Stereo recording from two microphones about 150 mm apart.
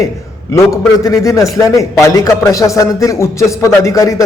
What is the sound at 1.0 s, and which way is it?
A man's voice, 20° left (ahead or behind).